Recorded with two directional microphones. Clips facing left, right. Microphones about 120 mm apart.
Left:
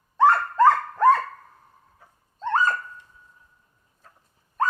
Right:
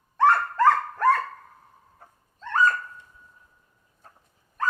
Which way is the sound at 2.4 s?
25° left (ahead or behind).